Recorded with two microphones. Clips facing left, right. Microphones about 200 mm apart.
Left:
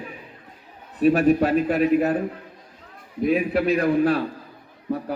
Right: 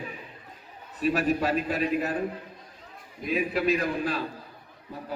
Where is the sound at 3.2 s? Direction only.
60° left (ahead or behind).